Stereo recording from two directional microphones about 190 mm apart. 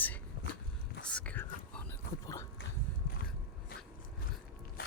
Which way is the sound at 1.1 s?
10° left (ahead or behind).